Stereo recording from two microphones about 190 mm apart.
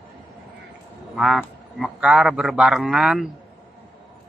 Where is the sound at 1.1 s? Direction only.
Centre (ahead or behind).